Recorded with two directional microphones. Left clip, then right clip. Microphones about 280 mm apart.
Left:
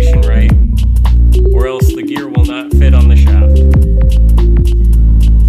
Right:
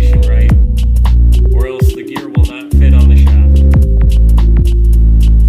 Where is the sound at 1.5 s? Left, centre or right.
Centre.